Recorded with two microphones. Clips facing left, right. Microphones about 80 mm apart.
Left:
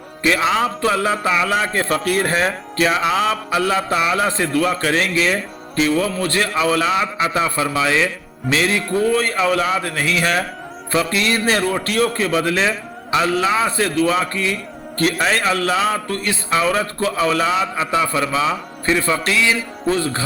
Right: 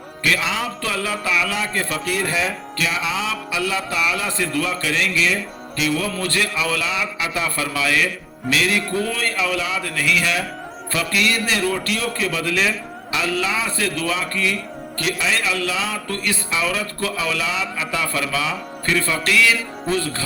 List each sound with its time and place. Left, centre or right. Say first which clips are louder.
0.2 s a man's voice: left 5 dB; left
9.3 s a man's voice: left 5 dB; left
16.1 s a man's voice: left 2 dB; left
16.5 s a man's voice: left 8 dB; left
17.9 s a man's voice: left 5 dB; left